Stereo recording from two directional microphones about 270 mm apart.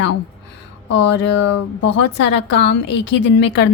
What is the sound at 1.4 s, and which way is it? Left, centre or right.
Speech, left.